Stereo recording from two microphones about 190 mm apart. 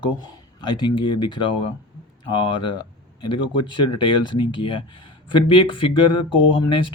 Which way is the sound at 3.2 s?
25° left (ahead or behind).